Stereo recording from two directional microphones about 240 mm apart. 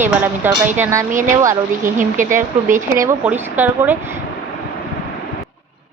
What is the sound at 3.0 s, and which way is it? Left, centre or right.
Speech, centre.